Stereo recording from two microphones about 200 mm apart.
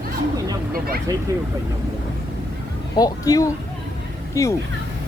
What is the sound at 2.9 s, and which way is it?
A man's voice, 20° left (ahead or behind).